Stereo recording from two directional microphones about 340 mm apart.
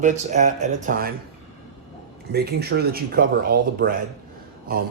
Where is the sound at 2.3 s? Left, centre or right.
Right.